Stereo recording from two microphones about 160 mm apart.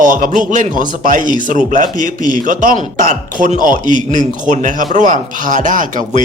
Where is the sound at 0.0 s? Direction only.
55° right (ahead or behind).